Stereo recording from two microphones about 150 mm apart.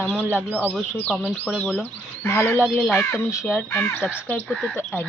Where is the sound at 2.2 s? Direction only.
15° left (ahead or behind).